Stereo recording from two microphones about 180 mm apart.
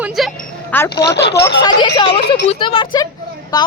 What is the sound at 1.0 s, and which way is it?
Speech, 70° left (ahead or behind).